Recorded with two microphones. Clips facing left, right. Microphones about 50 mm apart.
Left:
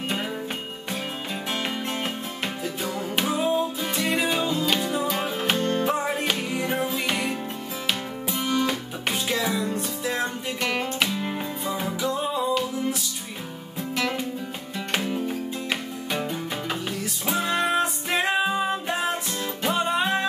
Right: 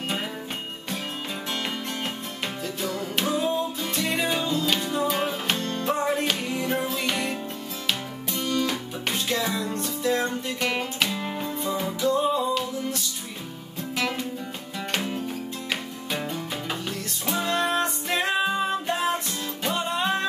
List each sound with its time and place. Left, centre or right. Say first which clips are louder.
2.0 s music: left 2 dB; centre
5.3 s music: left 4 dB; centre
9.1 s music: left 1 dB; centre
14.9 s music: left 2 dB; centre